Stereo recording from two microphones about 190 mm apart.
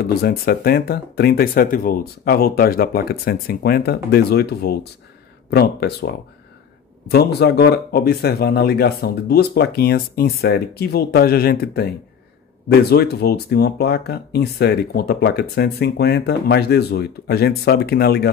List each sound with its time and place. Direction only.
0.0 s speech: 55° left (ahead or behind)